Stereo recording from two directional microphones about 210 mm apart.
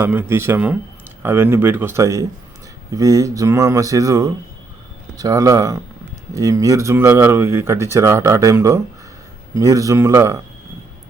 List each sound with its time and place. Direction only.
0.0 s speech: 10° right (ahead or behind)